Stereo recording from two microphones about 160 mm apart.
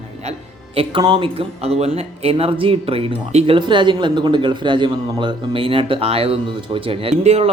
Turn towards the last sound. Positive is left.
turn(degrees=-40)  # may be behind; listen again after turning